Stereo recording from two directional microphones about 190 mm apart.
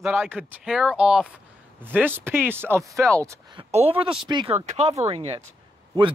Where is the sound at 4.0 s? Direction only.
5° right (ahead or behind).